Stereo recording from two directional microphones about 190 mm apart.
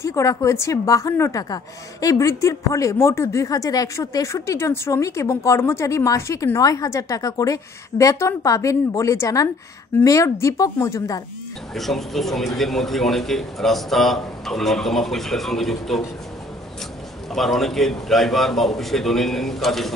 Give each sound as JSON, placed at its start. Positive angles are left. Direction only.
{"t": 0.0, "sound": "a woman's voice", "side_deg": 15}
{"t": 11.7, "sound": "a man's voice", "side_deg": 0}
{"t": 17.3, "sound": "a man's voice", "side_deg": 0}